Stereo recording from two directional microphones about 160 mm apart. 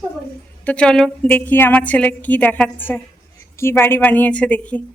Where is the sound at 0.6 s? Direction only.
5° left (ahead or behind).